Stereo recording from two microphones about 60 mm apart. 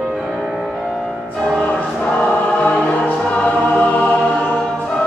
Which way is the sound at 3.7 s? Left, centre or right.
Left.